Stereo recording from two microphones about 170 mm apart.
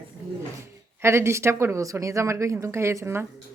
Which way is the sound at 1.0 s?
15° right (ahead or behind).